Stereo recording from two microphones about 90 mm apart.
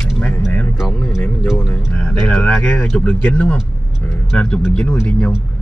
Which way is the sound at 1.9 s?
10° left (ahead or behind).